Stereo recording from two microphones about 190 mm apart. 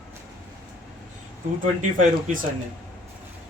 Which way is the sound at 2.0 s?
40° right (ahead or behind).